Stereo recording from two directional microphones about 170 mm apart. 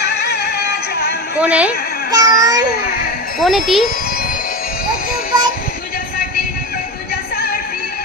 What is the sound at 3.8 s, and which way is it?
Music, 60° left (ahead or behind).